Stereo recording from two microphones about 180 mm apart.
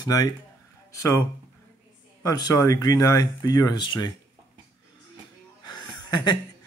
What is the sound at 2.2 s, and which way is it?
Speech, 20° left (ahead or behind).